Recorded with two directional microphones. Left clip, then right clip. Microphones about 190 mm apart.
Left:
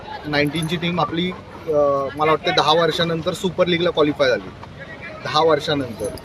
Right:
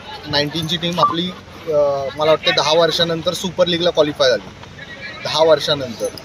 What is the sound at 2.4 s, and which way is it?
Speech, 45° left (ahead or behind).